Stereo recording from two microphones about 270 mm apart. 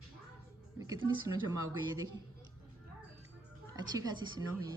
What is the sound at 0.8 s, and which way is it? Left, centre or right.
A woman's voice, centre.